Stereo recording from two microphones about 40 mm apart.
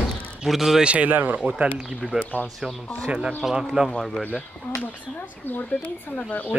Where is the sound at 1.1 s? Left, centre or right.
Right.